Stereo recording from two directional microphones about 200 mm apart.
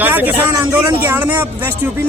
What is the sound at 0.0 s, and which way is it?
Speech, 10° right (ahead or behind).